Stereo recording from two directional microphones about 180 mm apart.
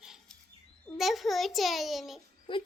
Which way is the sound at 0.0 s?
Centre (ahead or behind).